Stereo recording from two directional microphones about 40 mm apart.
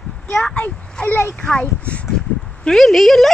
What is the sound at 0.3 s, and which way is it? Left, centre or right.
Speech, centre.